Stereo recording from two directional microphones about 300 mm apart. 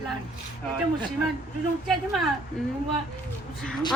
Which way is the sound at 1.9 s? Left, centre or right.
Centre.